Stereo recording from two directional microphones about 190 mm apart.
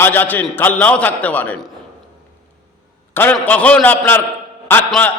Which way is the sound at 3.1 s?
10° left (ahead or behind).